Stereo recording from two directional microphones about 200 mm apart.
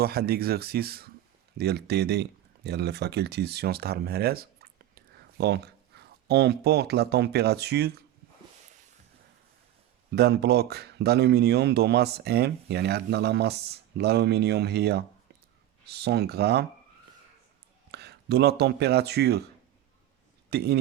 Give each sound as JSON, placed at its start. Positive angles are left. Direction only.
{"t": 0.0, "sound": "speech", "side_deg": -50}
{"t": 10.1, "sound": "speech", "side_deg": -55}
{"t": 17.9, "sound": "speech", "side_deg": -55}
{"t": 20.5, "sound": "a man's voice", "side_deg": -55}